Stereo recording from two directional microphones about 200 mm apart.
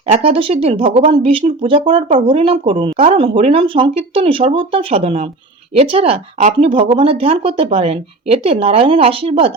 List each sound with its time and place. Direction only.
0.1 s speech: 30° right (ahead or behind)